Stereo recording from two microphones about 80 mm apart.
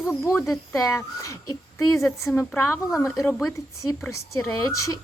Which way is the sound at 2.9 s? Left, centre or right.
Centre.